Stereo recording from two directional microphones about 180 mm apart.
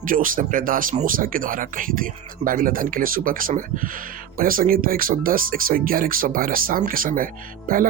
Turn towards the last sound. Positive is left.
turn(degrees=-50)  # may be behind; listen again after turning